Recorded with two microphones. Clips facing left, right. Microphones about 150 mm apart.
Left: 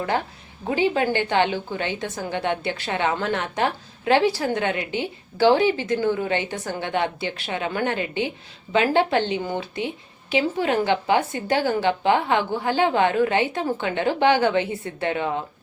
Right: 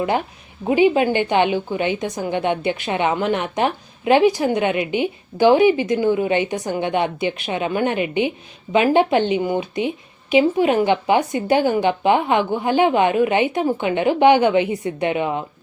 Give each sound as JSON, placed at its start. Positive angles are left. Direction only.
{"t": 0.7, "sound": "a woman's voice", "side_deg": -15}